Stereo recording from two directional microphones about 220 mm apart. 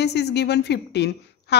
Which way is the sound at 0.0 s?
50° left (ahead or behind).